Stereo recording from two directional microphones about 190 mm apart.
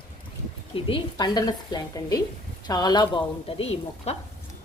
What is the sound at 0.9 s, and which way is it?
A woman's voice, 25° left (ahead or behind).